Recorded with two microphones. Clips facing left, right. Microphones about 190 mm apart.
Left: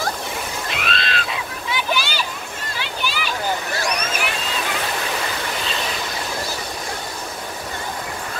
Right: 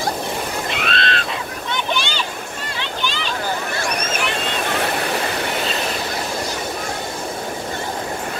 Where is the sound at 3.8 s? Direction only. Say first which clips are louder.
Right 1 dB; 50° right (ahead or behind).